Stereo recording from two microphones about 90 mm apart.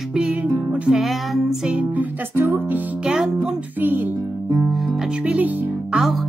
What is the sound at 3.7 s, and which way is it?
Music, 20° right (ahead or behind).